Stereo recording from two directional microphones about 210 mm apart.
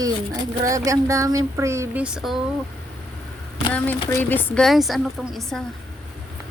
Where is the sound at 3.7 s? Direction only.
10° left (ahead or behind).